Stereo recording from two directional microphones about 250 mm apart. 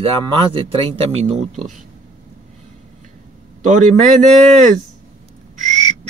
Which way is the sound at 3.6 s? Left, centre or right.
Right.